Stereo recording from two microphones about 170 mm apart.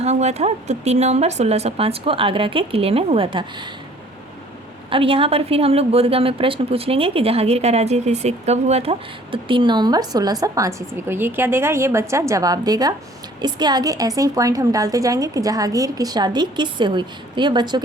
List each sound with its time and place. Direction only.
0.0 s a woman's voice: 40° right (ahead or behind)
4.9 s a woman's voice: 30° right (ahead or behind)